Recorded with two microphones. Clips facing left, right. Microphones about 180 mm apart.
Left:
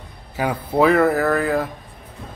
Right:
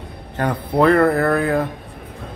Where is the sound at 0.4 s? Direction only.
5° left (ahead or behind).